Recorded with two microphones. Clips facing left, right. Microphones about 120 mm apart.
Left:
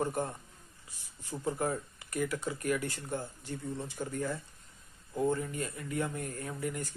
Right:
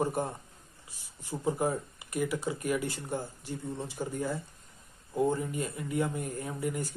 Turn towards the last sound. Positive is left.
turn(degrees=-15)  # may be behind; listen again after turning